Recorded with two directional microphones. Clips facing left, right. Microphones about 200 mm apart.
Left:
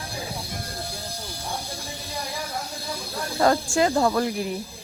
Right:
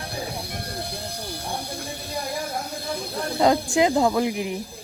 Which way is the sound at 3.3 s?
20° right (ahead or behind).